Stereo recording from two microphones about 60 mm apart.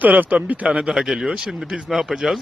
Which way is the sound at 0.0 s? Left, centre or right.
Right.